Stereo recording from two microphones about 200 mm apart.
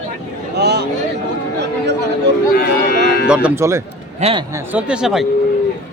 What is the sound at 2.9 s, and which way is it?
Music, 50° left (ahead or behind).